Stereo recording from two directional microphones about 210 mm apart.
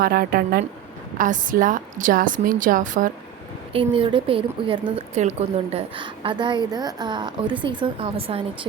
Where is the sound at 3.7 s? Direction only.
25° right (ahead or behind).